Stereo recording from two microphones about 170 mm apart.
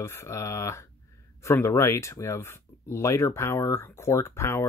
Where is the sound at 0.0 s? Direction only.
15° left (ahead or behind).